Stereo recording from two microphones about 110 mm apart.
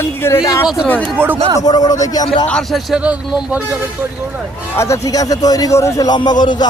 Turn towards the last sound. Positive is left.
turn(degrees=40)  # may be behind; listen again after turning